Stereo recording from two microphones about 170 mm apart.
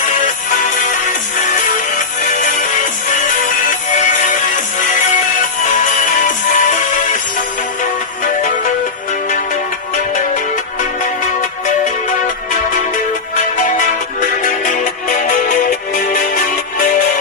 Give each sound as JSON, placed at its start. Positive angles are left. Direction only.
{"t": 3.9, "sound": "music", "side_deg": 50}
{"t": 5.6, "sound": "music", "side_deg": 45}
{"t": 13.6, "sound": "music", "side_deg": 50}